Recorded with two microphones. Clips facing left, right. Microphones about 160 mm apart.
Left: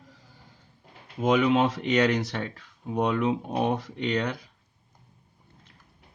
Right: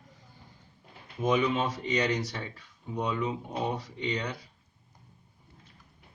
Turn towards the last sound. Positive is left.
turn(degrees=70)  # may be behind; listen again after turning